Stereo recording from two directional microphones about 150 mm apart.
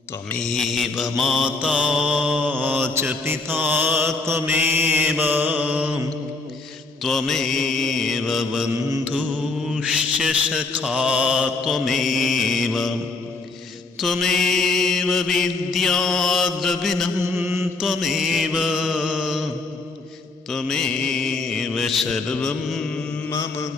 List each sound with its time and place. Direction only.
0.3 s mantra: centre (ahead or behind)
7.0 s mantra: centre (ahead or behind)
9.8 s mantra: 5° right (ahead or behind)
14.0 s mantra: centre (ahead or behind)
17.3 s mantra: 15° right (ahead or behind)
17.7 s mantra: centre (ahead or behind)
20.5 s mantra: 5° left (ahead or behind)
23.3 s mantra: 20° left (ahead or behind)